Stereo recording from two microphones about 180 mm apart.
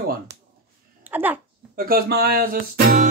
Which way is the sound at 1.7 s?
55° right (ahead or behind).